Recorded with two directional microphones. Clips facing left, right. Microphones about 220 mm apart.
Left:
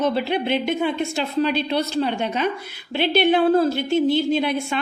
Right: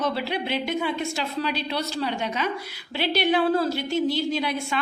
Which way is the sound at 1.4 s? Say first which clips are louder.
Left 6 dB; 55° left (ahead or behind).